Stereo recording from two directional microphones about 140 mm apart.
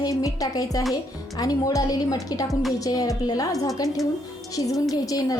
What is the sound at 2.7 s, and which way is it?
Music, 25° left (ahead or behind).